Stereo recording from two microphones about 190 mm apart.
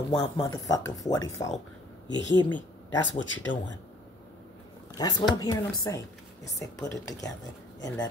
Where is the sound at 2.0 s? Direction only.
70° left (ahead or behind).